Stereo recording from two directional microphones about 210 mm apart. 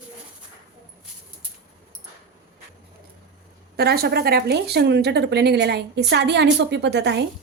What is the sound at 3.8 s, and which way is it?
Speech, 50° right (ahead or behind).